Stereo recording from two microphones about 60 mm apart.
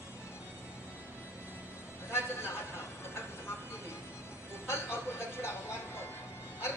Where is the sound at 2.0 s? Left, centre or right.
Left.